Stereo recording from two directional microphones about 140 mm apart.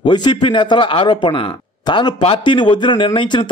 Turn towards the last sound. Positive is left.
turn(degrees=35)  # may be behind; listen again after turning